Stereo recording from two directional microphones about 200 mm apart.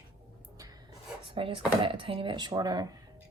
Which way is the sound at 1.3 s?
25° right (ahead or behind).